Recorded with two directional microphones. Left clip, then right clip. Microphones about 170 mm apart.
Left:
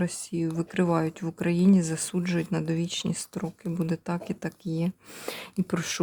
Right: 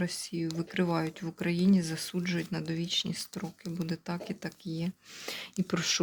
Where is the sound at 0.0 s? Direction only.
35° left (ahead or behind).